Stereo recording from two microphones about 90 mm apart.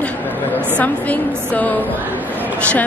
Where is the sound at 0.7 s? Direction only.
15° left (ahead or behind).